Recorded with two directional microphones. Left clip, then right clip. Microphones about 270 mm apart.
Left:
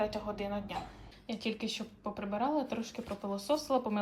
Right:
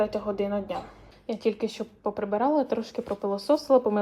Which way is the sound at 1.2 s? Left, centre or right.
Centre.